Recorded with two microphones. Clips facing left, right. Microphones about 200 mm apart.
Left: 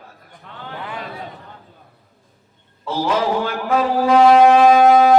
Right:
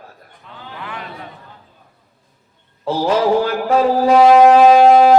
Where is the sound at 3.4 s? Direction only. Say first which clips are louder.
Right 4 dB; 35° right (ahead or behind).